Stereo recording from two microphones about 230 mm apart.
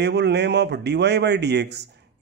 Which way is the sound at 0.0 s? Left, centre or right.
Right.